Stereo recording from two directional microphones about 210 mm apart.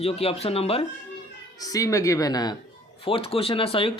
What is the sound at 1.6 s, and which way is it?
Speech, 15° left (ahead or behind).